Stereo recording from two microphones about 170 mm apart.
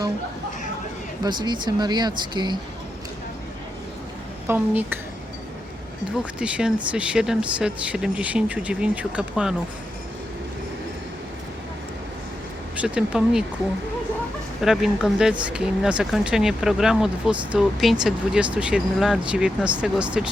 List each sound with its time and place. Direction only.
1.2 s speech: 25° right (ahead or behind)
4.4 s speech: 10° right (ahead or behind)
6.4 s speech: 5° right (ahead or behind)
12.7 s speech: 5° right (ahead or behind)
14.6 s speech: centre (ahead or behind)